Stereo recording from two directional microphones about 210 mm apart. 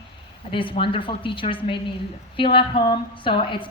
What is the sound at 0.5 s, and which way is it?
A woman's voice, 25° left (ahead or behind).